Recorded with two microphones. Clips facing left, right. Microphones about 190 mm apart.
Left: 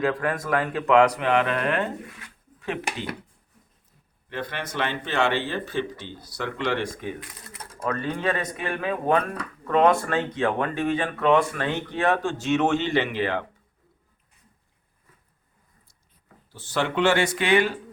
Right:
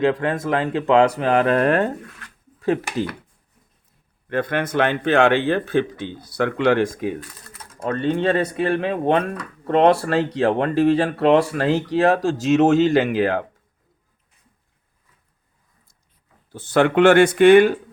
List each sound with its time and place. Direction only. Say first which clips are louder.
0.0 s speech: right 5 dB; 25° right (ahead or behind); by 1.9 s 40° right (ahead or behind)
4.3 s speech: right 10 dB; 55° right (ahead or behind)
7.8 s speech: right 7 dB; 30° right (ahead or behind); by 13.4 s 45° right (ahead or behind)
16.5 s speech: right 9 dB; 50° right (ahead or behind)